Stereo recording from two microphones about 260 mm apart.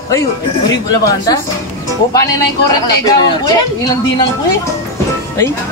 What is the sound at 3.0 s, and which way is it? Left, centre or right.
Speech, centre.